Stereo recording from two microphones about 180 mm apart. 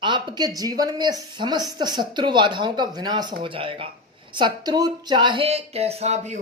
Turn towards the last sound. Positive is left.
turn(degrees=-35)  # may be behind; listen again after turning